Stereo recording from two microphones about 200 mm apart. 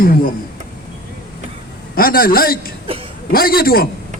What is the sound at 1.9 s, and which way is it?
A man's voice, 45° left (ahead or behind).